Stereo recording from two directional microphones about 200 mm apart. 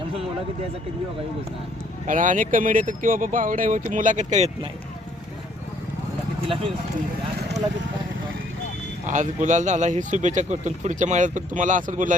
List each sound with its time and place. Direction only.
2.0 s speech: 40° right (ahead or behind)
9.0 s speech: 40° right (ahead or behind)